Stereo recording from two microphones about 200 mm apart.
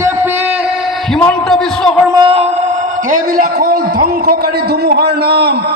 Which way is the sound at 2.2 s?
30° right (ahead or behind).